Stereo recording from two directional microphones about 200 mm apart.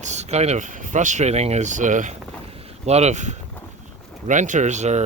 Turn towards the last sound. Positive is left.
turn(degrees=-35)  # may be behind; listen again after turning